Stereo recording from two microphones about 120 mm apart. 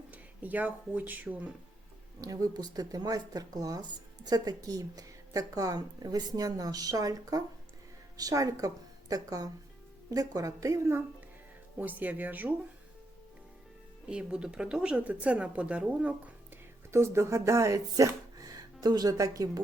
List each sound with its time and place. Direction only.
0.1 s speech: 15° right (ahead or behind)
2.2 s a woman's voice: 30° right (ahead or behind)
11.8 s a woman's voice: 15° right (ahead or behind)
14.1 s a woman's voice: 10° right (ahead or behind)
16.9 s speech: 25° right (ahead or behind)